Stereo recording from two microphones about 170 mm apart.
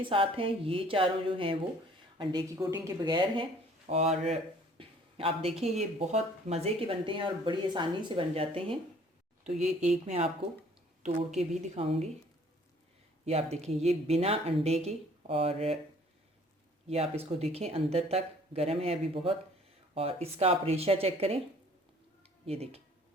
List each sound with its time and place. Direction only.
0.0 s speech: 30° right (ahead or behind)
3.8 s speech: 40° right (ahead or behind)
11.3 s speech: 40° right (ahead or behind)
13.2 s speech: 40° right (ahead or behind)
16.8 s speech: 35° right (ahead or behind)
22.4 s speech: 35° right (ahead or behind)